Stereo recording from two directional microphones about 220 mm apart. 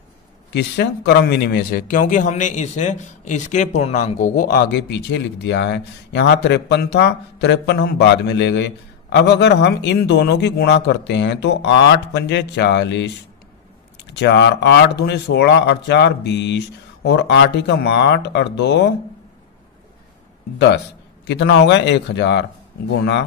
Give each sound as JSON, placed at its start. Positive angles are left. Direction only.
{"t": 0.5, "sound": "speech", "side_deg": 50}
{"t": 20.5, "sound": "speech", "side_deg": 50}